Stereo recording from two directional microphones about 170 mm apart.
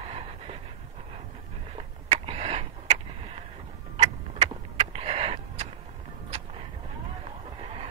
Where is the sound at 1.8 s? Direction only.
35° right (ahead or behind).